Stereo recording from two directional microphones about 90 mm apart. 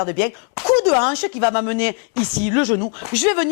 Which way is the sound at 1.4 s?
15° left (ahead or behind).